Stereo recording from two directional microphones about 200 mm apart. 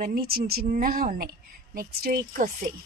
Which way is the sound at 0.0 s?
50° right (ahead or behind).